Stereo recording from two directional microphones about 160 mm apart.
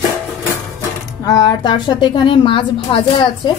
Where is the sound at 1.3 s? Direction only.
25° left (ahead or behind).